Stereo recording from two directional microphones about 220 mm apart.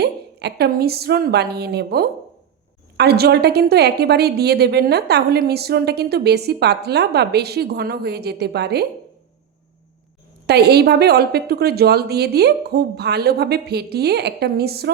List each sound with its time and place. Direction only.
0.0 s a woman's voice: 50° right (ahead or behind)
10.4 s a woman's voice: 45° right (ahead or behind)